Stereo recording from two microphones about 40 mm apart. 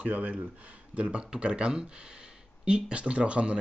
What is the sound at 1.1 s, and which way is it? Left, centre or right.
Speech, right.